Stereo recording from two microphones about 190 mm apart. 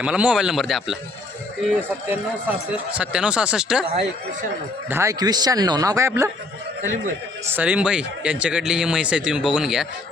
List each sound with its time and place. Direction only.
0.0 s speech: 5° right (ahead or behind)
2.0 s speech: 10° right (ahead or behind)
4.9 s a man's voice: 15° right (ahead or behind)
7.5 s speech: 10° right (ahead or behind)